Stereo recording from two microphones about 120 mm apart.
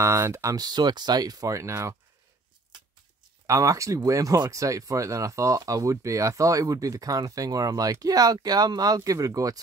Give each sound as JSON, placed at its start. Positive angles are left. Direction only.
{"t": 0.0, "sound": "speech", "side_deg": -20}
{"t": 3.4, "sound": "speech", "side_deg": -25}